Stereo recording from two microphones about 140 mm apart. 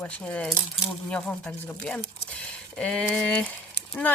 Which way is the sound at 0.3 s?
10° left (ahead or behind).